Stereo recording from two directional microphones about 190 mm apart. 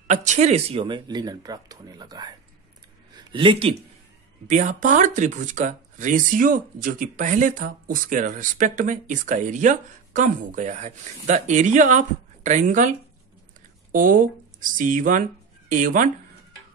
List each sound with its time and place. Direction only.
0.0 s speech: 40° right (ahead or behind)
4.5 s speech: 40° right (ahead or behind)
13.9 s speech: 45° right (ahead or behind)